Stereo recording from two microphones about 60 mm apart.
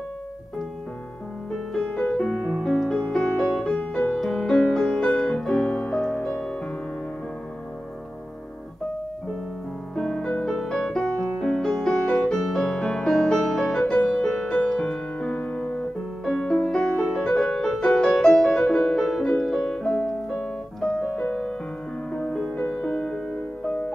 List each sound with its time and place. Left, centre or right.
2.0 s music: centre
3.7 s music: left
4.2 s music: centre
6.1 s music: left
9.9 s music: centre
13.7 s music: left
14.0 s music: centre
19.2 s piano: centre
21.2 s music: centre